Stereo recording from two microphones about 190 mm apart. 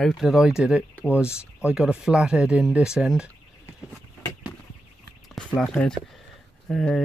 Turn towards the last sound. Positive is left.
turn(degrees=5)  # may be behind; listen again after turning